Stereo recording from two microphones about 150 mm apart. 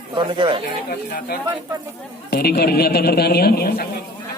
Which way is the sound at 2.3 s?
90° left.